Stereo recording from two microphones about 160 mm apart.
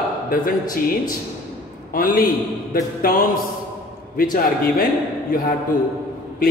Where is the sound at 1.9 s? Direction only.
60° left (ahead or behind).